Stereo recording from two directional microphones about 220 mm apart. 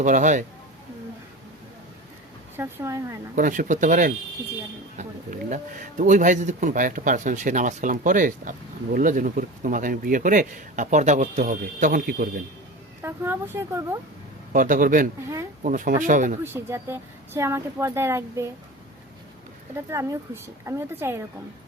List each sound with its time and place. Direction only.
0.0 s speech: 35° right (ahead or behind)
2.6 s speech: 10° right (ahead or behind)
3.3 s speech: 40° right (ahead or behind)
13.0 s speech: 10° right (ahead or behind)
14.5 s speech: 40° right (ahead or behind)
16.4 s speech: 10° right (ahead or behind)
19.7 s speech: 15° right (ahead or behind)